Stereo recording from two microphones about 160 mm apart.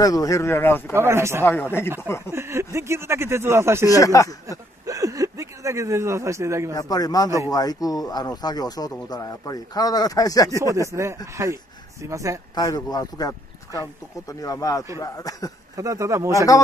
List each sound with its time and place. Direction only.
0.0 s speech: 20° left (ahead or behind)
0.9 s speech: 15° right (ahead or behind)
1.4 s speech: 15° left (ahead or behind)
2.3 s speech: 15° right (ahead or behind)
3.8 s speech: 20° left (ahead or behind)
4.5 s a sound: 20° right (ahead or behind)
6.7 s speech: 25° left (ahead or behind)
10.6 s a man's voice: 20° right (ahead or behind)
12.5 s speech: 25° left (ahead or behind)
14.4 s speech: 20° left (ahead or behind)
15.7 s a man's voice: 20° right (ahead or behind)